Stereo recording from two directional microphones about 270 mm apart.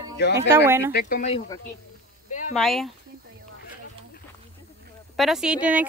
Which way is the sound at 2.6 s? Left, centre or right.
Centre.